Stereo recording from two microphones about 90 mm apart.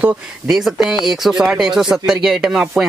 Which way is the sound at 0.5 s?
5° right (ahead or behind).